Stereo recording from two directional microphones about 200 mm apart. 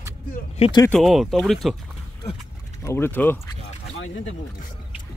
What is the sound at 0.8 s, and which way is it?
Speech, centre (ahead or behind).